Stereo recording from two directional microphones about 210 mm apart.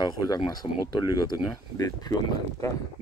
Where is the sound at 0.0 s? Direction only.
20° left (ahead or behind).